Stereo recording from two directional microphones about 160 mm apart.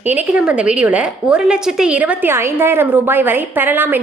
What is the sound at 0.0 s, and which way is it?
A woman's voice, 10° right (ahead or behind).